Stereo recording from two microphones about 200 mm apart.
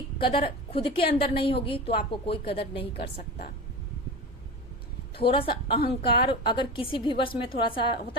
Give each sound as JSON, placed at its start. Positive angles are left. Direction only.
{"t": 0.3, "sound": "a woman's voice", "side_deg": 25}
{"t": 3.2, "sound": "speech", "side_deg": 50}
{"t": 5.2, "sound": "a woman's voice", "side_deg": 25}